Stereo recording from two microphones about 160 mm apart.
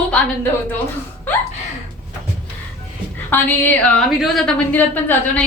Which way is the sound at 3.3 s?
10° left (ahead or behind).